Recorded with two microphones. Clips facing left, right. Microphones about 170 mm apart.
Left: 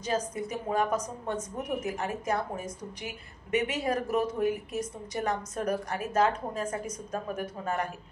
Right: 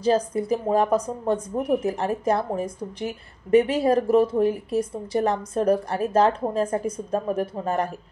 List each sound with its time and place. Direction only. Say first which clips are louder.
0.0 s a woman's voice: right 9 dB; 35° right (ahead or behind)